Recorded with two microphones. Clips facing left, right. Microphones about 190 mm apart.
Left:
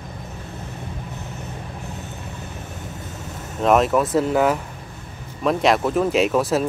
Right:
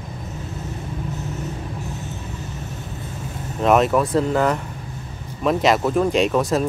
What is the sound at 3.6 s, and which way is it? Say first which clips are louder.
Speech: even; centre (ahead or behind).